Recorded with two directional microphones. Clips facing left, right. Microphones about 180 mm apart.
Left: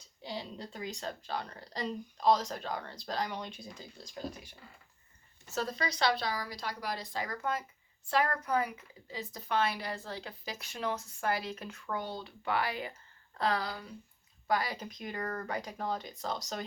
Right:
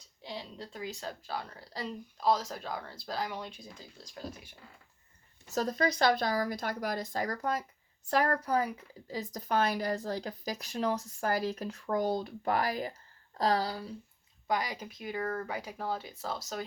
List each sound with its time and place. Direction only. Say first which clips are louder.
0.2 s speech: left 1 dB; centre (ahead or behind)
5.5 s speech: right 5 dB; 45° right (ahead or behind)
14.4 s speech: even; 20° right (ahead or behind)